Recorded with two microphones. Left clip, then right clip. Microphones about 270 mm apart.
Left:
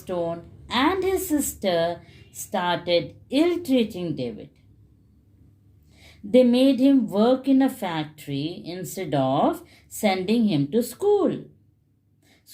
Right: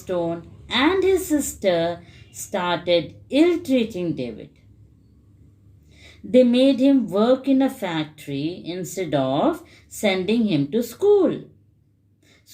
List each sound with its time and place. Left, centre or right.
0.0 s speech: left
6.0 s speech: left